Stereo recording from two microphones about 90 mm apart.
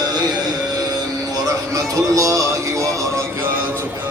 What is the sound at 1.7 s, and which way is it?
Music, 40° right (ahead or behind).